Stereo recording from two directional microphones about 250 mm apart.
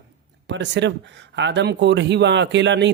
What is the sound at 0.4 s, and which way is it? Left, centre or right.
A man's voice, right.